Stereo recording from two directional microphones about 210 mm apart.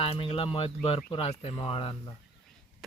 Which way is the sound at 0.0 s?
25° left (ahead or behind).